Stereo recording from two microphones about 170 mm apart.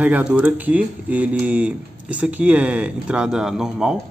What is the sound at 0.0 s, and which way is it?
A man's voice, 10° right (ahead or behind).